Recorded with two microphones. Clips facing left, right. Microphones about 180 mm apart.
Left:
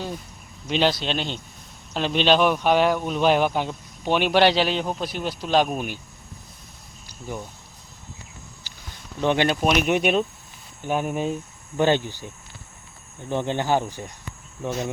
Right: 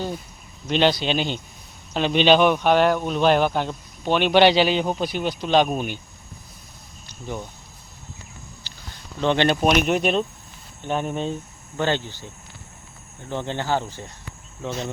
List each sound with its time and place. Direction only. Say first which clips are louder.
0.7 s speech: right 2 dB; centre (ahead or behind)
9.2 s speech: right 2 dB; 10° left (ahead or behind)
13.3 s speech: left 2 dB; 15° left (ahead or behind)